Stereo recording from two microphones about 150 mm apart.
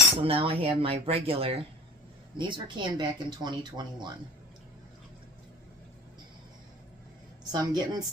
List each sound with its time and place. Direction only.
0.2 s speech: 40° right (ahead or behind)
7.5 s speech: 25° right (ahead or behind)